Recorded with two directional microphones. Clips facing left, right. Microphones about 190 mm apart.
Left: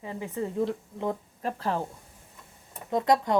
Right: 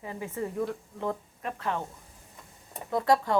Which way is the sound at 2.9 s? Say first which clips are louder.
Left 1 dB; 20° left (ahead or behind).